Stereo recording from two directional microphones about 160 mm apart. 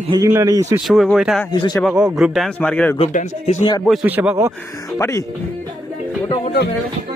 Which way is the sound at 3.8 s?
5° right (ahead or behind).